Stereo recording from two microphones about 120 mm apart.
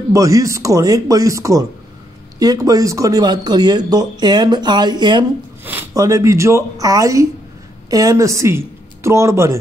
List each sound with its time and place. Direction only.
0.1 s speech: 25° right (ahead or behind)